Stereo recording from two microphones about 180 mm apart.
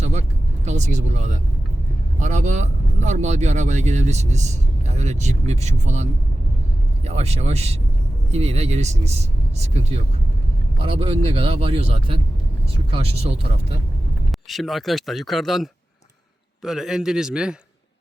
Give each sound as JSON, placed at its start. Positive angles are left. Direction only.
{"t": 0.0, "sound": "vehicle", "side_deg": -40}
{"t": 2.1, "sound": "speech", "side_deg": -45}
{"t": 14.5, "sound": "speech", "side_deg": 0}